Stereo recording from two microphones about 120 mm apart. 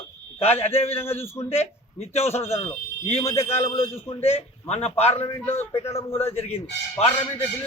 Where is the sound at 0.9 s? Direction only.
20° left (ahead or behind).